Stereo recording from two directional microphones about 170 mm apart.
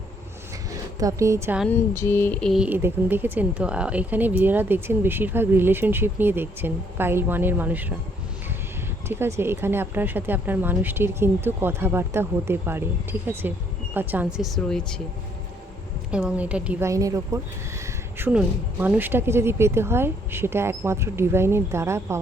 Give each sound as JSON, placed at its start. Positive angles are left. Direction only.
{"t": 0.9, "sound": "speech", "side_deg": -20}
{"t": 1.6, "sound": "speech", "side_deg": 15}
{"t": 9.0, "sound": "speech", "side_deg": -15}
{"t": 16.1, "sound": "speech", "side_deg": -5}
{"t": 16.9, "sound": "speech", "side_deg": -20}